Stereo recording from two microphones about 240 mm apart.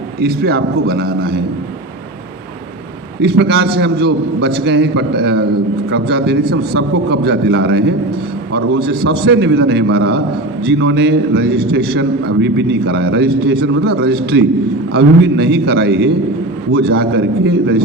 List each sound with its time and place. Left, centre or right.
0.2 s a man's voice: right
3.2 s a man's voice: right